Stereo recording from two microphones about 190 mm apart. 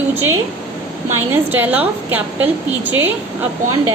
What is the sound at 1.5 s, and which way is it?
Speech, 10° right (ahead or behind).